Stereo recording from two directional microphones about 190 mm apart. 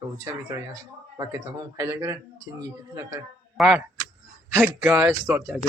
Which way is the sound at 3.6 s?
5° right (ahead or behind).